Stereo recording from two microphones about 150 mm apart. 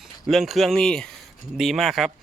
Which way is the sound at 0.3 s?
Centre (ahead or behind).